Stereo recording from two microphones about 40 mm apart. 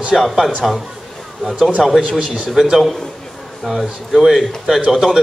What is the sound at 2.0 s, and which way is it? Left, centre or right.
Speech, right.